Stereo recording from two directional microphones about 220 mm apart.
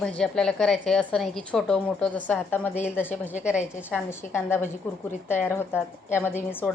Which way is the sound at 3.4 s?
5° right (ahead or behind).